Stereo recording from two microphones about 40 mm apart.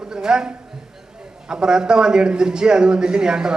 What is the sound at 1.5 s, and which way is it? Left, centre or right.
A man's voice, centre.